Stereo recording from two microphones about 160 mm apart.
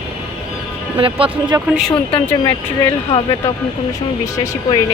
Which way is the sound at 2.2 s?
20° left (ahead or behind).